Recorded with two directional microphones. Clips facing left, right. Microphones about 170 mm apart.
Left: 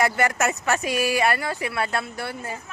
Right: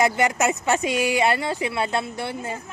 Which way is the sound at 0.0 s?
20° right (ahead or behind).